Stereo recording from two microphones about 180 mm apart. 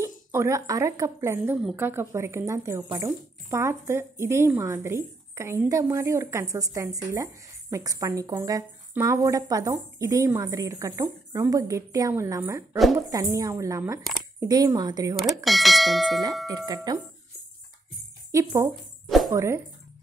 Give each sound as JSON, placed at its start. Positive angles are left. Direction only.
{"t": 0.0, "sound": "speech", "side_deg": -15}
{"t": 15.1, "sound": "speech", "side_deg": 0}
{"t": 16.4, "sound": "speech", "side_deg": -20}
{"t": 18.3, "sound": "speech", "side_deg": -20}
{"t": 19.0, "sound": "music", "side_deg": 0}
{"t": 19.3, "sound": "speech", "side_deg": -15}